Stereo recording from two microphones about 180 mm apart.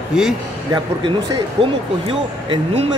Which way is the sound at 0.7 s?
25° right (ahead or behind).